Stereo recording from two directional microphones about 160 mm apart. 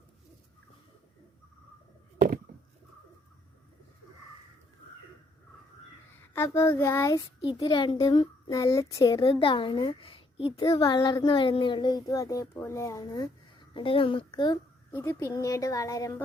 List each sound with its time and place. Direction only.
2.5 s bird: 90° right
6.3 s child singing: 15° left (ahead or behind)
7.4 s speech: 30° left (ahead or behind)
8.4 s speech: 20° left (ahead or behind)
9.1 s speech: 35° left (ahead or behind)
13.7 s speech: 35° left (ahead or behind)
14.9 s speech: 15° left (ahead or behind)